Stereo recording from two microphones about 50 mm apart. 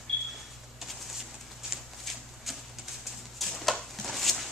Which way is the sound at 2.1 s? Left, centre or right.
Centre.